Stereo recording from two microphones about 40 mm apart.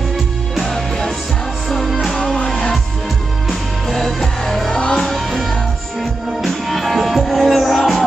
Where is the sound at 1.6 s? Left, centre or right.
Centre.